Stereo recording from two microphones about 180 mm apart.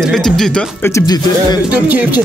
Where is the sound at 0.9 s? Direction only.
20° left (ahead or behind).